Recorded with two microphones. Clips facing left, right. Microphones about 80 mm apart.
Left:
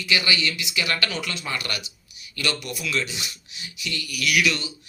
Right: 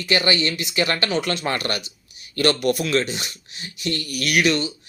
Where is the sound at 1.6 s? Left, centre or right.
Right.